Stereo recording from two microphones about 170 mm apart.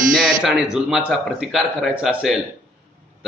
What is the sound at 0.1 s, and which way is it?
A man's voice, 5° right (ahead or behind).